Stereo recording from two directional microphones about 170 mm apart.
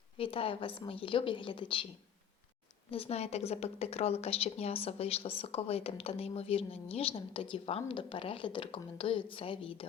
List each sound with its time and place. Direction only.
0.2 s speech: 30° left (ahead or behind)
2.9 s speech: 35° left (ahead or behind)